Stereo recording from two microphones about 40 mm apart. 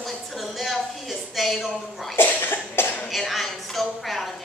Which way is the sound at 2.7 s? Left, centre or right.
Left.